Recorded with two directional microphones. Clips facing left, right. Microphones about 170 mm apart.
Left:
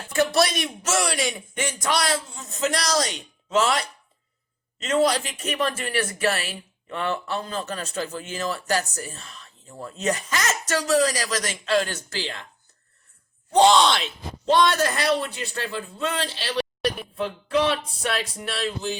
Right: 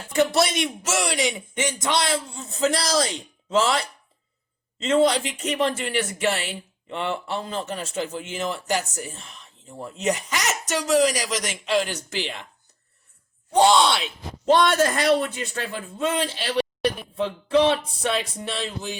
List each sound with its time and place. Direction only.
0.2 s a woman's voice: 20° right (ahead or behind)
13.5 s a woman's voice: 10° right (ahead or behind)
14.5 s a man's voice: 50° right (ahead or behind)
16.0 s speech: 15° right (ahead or behind)